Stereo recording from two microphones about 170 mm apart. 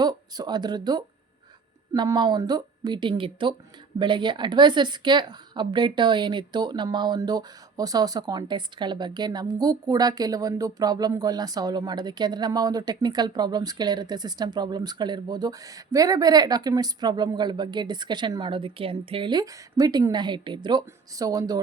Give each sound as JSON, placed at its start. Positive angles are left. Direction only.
{"t": 0.0, "sound": "a woman's voice", "side_deg": -25}